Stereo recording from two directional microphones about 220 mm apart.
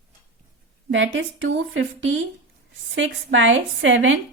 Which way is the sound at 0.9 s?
60° right (ahead or behind).